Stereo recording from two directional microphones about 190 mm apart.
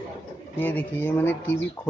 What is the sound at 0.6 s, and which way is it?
Speech, 10° left (ahead or behind).